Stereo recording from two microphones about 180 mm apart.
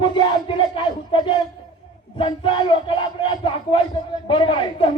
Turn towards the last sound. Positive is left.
turn(degrees=25)  # may be behind; listen again after turning